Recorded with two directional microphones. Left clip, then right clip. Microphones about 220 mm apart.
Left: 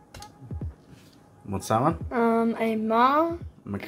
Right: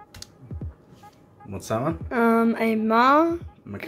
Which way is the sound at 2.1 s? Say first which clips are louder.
Right 6 dB; 15° right (ahead or behind).